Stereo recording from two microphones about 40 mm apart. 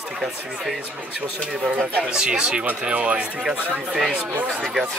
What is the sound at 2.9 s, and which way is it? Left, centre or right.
Speech, right.